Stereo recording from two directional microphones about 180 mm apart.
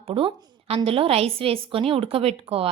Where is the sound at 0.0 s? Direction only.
30° right (ahead or behind).